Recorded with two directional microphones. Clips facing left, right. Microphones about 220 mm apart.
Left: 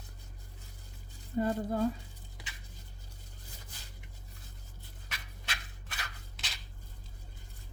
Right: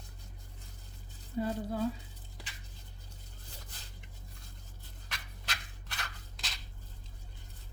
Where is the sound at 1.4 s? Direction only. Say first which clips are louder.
Left 3 dB; 50° left (ahead or behind).